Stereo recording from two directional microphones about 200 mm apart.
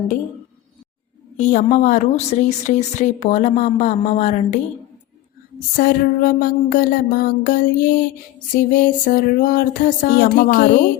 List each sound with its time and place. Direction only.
1.4 s a woman's voice: 40° left (ahead or behind)
5.7 s music: 45° left (ahead or behind)